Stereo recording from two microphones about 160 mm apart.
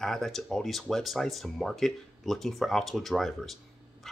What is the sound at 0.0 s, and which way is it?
Speech, centre (ahead or behind).